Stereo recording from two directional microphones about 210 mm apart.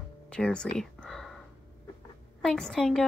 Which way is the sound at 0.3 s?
5° left (ahead or behind).